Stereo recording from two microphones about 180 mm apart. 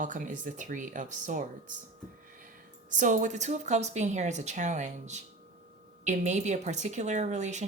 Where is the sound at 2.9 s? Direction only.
45° right (ahead or behind).